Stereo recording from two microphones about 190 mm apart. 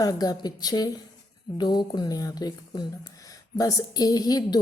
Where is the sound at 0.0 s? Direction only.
20° left (ahead or behind).